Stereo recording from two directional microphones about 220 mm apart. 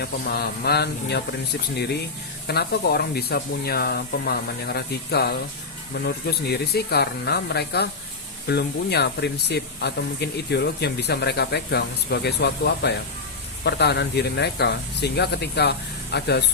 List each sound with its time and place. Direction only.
0.0 s speech: 45° left (ahead or behind)
2.5 s speech: 45° left (ahead or behind)